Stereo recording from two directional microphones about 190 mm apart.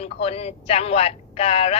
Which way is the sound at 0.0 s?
30° left (ahead or behind).